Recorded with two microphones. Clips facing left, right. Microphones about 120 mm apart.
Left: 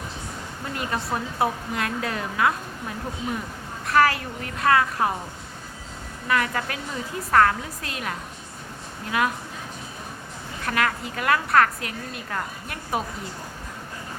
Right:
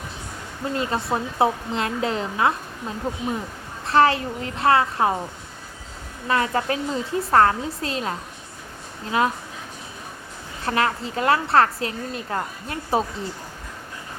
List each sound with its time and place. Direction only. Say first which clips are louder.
0.7 s a woman's voice: right 4 dB; 25° right (ahead or behind)
3.8 s a woman's voice: right 2 dB; 25° right (ahead or behind)
6.2 s a woman's voice: right 3 dB; 30° right (ahead or behind)
10.7 s a woman's voice: right 3 dB; 30° right (ahead or behind)